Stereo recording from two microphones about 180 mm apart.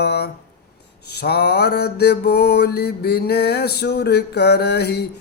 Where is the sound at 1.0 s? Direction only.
65° left (ahead or behind).